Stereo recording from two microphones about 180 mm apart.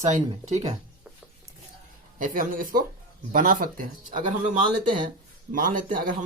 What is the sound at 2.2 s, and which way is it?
Speech, 50° right (ahead or behind).